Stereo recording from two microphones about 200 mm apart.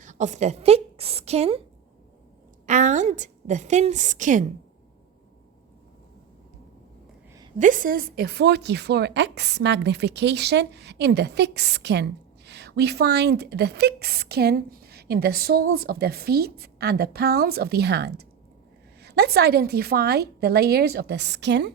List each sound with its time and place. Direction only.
0.0 s a woman's voice: 40° right (ahead or behind)
2.6 s a woman's voice: 40° right (ahead or behind)
7.6 s speech: 40° right (ahead or behind); by 21.7 s 60° right (ahead or behind)